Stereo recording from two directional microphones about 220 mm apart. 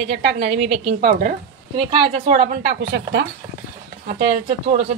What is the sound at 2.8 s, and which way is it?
Speech, 50° right (ahead or behind).